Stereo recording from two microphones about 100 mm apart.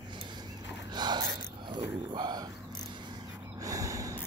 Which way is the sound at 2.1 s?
45° right (ahead or behind).